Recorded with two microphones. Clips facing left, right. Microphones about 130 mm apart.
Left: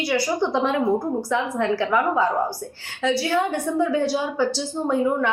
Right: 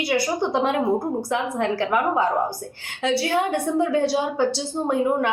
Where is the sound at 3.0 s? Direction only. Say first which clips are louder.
Even; 60° right (ahead or behind).